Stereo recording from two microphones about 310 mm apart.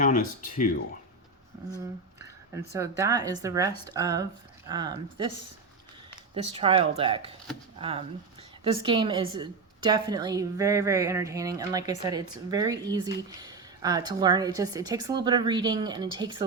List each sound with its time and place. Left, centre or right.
0.0 s speech: left
2.7 s a woman's voice: centre